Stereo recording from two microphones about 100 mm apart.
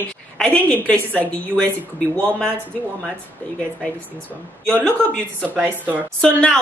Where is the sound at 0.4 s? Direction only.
15° left (ahead or behind).